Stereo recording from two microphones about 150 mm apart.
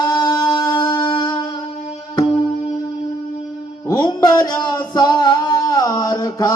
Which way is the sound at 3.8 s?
25° left (ahead or behind).